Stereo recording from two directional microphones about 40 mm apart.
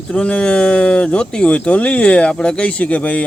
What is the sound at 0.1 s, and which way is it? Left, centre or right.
Speech, left.